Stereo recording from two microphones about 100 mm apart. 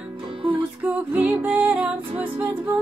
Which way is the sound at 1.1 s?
15° right (ahead or behind).